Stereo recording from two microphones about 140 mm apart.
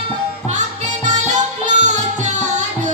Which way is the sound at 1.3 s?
60° right (ahead or behind).